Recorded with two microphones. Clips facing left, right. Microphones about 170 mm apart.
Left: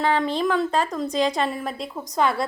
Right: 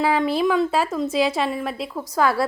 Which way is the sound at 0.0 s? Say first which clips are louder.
Right 2 dB; 5° right (ahead or behind).